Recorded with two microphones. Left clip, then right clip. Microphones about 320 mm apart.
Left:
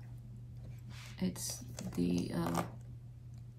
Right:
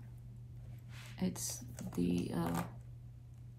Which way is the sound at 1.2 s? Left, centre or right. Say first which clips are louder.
Even; centre.